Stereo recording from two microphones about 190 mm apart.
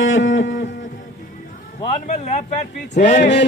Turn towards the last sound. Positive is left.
turn(degrees=35)  # may be behind; listen again after turning